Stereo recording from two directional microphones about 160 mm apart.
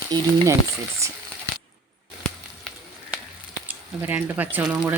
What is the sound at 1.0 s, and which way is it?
Crumpling, 20° right (ahead or behind).